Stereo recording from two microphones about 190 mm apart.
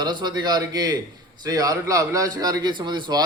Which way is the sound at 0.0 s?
25° right (ahead or behind).